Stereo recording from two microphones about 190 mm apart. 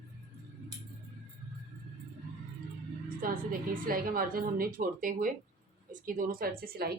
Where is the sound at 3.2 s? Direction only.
50° right (ahead or behind).